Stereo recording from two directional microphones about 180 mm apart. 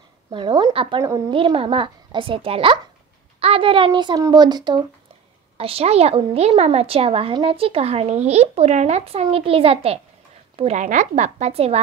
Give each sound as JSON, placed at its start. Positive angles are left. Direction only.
{"t": 0.3, "sound": "a child's voice", "side_deg": -25}